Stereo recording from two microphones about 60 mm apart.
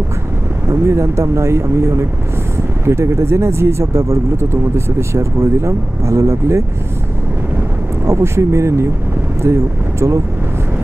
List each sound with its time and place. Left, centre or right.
0.7 s speech: right
8.1 s speech: right